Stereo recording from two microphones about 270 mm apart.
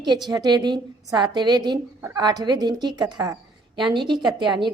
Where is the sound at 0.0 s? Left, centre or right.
Centre.